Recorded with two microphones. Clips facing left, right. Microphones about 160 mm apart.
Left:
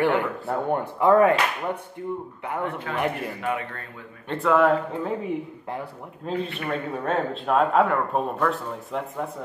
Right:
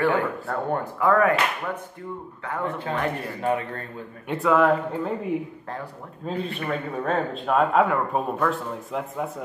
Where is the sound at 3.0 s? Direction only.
15° left (ahead or behind).